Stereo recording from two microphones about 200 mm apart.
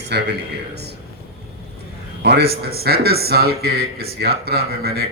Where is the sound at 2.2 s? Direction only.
55° right (ahead or behind).